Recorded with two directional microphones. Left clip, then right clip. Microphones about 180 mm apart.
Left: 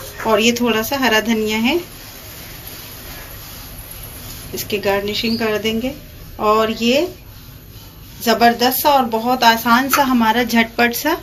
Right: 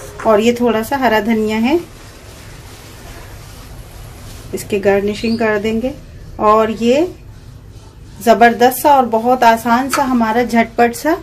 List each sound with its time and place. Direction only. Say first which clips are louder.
0.2 s speech: right 3 dB; 25° right (ahead or behind)
4.6 s speech: right 5 dB; 30° right (ahead or behind)
8.3 s speech: right 5 dB; 35° right (ahead or behind)